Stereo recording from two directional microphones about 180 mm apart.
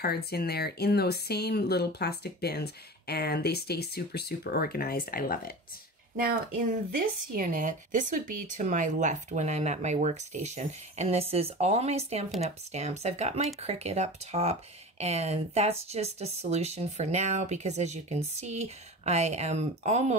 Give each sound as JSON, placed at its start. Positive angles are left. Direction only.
{"t": 0.0, "sound": "speech", "side_deg": 60}
{"t": 6.1, "sound": "speech", "side_deg": -55}